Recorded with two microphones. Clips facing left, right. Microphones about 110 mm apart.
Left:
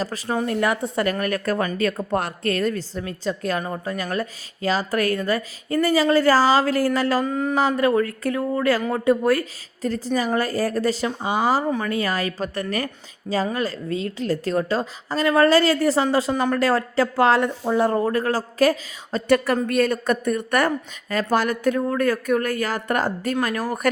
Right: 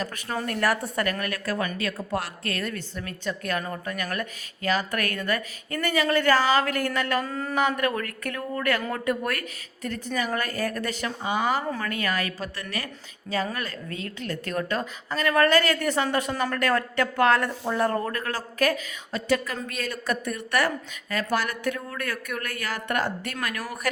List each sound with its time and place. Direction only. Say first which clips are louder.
0.3 s a woman's voice: left 4 dB; 20° left (ahead or behind); by 2.7 s 40° left (ahead or behind)
3.0 s a woman's voice: left 4 dB; 30° left (ahead or behind)
7.3 s speech: left 8 dB; 15° left (ahead or behind)
7.8 s a woman's voice: left 8 dB; 30° left (ahead or behind)
19.5 s a woman's voice: left 12 dB; 55° left (ahead or behind); by 23.8 s 35° left (ahead or behind)